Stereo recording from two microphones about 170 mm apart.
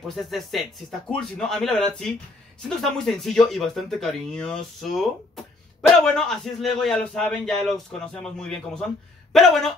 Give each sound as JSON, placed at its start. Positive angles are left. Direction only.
{"t": 0.1, "sound": "speech", "side_deg": 0}